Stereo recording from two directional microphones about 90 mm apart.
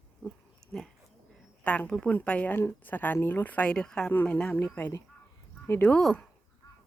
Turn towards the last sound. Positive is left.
turn(degrees=5)  # may be behind; listen again after turning